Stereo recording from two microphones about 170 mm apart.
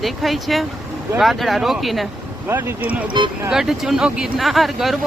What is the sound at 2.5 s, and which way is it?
Speech, 15° right (ahead or behind).